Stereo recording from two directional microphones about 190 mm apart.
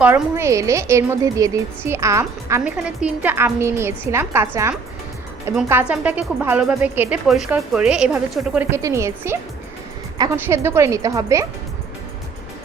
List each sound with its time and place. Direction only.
0.0 s a woman's voice: 10° right (ahead or behind)